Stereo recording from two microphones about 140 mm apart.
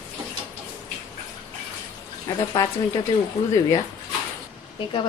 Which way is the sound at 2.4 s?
30° left (ahead or behind).